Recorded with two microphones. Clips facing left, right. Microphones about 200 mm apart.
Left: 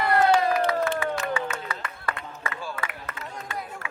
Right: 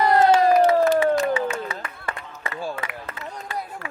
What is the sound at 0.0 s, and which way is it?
Crowd, 40° right (ahead or behind).